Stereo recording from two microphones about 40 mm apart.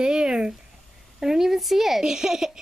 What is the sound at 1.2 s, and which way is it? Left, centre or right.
Speech, centre.